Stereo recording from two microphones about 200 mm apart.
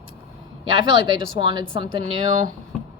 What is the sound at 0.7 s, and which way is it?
Speech, 25° right (ahead or behind).